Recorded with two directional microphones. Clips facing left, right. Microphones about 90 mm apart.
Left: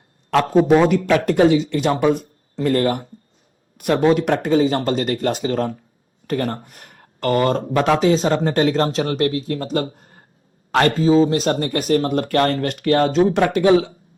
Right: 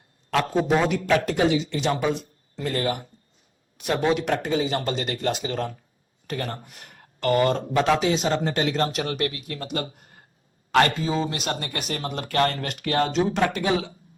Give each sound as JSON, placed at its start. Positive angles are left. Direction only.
{"t": 0.3, "sound": "speech", "side_deg": 40}